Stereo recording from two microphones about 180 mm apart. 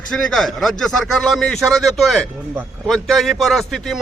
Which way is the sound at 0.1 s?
Centre (ahead or behind).